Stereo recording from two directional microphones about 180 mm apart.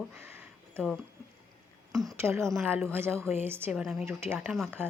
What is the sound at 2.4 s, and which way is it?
Speech, centre (ahead or behind).